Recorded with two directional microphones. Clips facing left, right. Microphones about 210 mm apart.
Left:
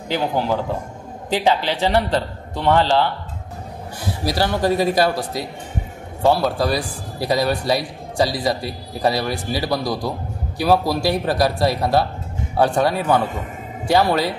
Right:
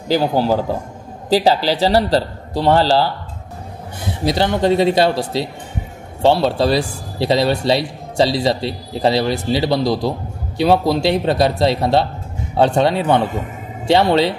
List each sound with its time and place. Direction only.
0.1 s a man's voice: 35° right (ahead or behind)
4.0 s a man's voice: 20° right (ahead or behind)